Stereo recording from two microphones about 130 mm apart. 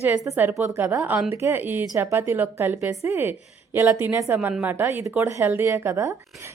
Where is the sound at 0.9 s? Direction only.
10° right (ahead or behind).